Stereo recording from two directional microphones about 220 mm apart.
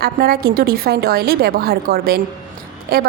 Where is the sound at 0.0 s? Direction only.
45° right (ahead or behind).